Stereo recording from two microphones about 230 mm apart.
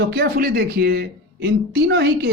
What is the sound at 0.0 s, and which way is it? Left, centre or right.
Speech, right.